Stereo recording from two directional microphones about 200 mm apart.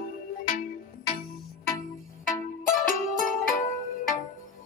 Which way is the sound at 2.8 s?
40° left (ahead or behind).